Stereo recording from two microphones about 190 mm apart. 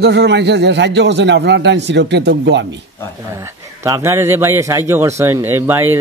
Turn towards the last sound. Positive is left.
turn(degrees=-10)  # may be behind; listen again after turning